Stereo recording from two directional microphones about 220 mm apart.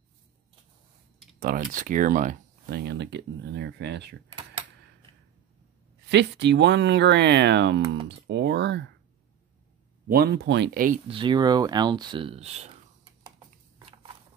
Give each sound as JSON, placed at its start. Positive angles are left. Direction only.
{"t": 1.4, "sound": "speech", "side_deg": -40}
{"t": 6.0, "sound": "speech", "side_deg": -50}
{"t": 10.0, "sound": "speech", "side_deg": -45}
{"t": 11.1, "sound": "speech", "side_deg": -20}